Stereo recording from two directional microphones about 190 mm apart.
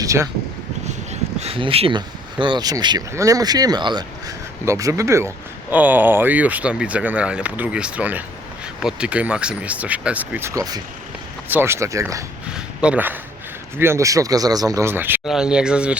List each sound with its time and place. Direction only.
0.0 s speech: 15° right (ahead or behind)
0.9 s speech: 35° right (ahead or behind); by 12.2 s 15° right (ahead or behind)
12.5 s a sound: 5° right (ahead or behind)
13.7 s speech: 15° right (ahead or behind)